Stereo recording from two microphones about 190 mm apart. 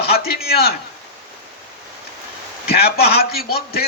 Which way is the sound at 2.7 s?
55° left (ahead or behind).